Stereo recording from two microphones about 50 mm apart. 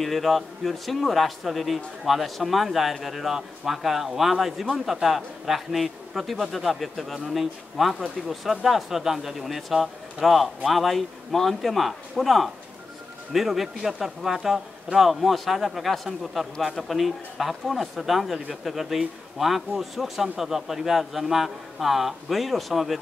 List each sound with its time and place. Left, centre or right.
0.0 s a man's voice: centre